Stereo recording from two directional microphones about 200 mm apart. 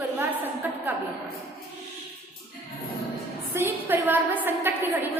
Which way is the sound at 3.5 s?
10° right (ahead or behind).